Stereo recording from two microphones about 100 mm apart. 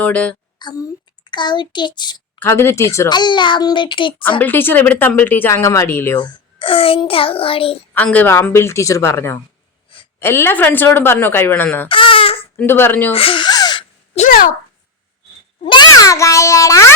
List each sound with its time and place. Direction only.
0.0 s a child's voice: 15° left (ahead or behind)
0.6 s a child's voice: 45° left (ahead or behind)
2.4 s speech: 25° left (ahead or behind)
3.1 s a child's voice: 50° left (ahead or behind)
4.2 s speech: 20° left (ahead or behind)
5.6 s speech: 30° left (ahead or behind)
6.1 s a child's voice: 50° left (ahead or behind); by 7.0 s 65° left (ahead or behind)
7.0 s child singing: 65° left (ahead or behind)
7.9 s a child's voice: 15° left (ahead or behind)
11.9 s baby cry: 60° left (ahead or behind)
12.5 s speech: 20° left (ahead or behind)
13.1 s gasp: 60° left (ahead or behind); by 13.8 s 45° left (ahead or behind)
14.1 s a child's voice: 90° left
15.6 s a child's voice: 50° left (ahead or behind); by 16.9 s 30° left (ahead or behind)